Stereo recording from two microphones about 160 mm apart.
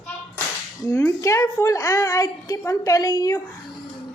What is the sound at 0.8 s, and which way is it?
A woman's voice, 20° left (ahead or behind).